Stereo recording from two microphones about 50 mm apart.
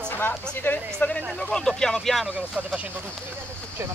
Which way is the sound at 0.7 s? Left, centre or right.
Left.